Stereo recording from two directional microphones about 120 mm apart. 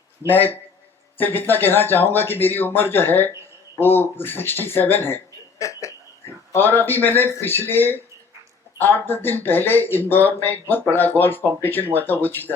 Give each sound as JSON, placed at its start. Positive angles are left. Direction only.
{"t": 0.3, "sound": "speech", "side_deg": 15}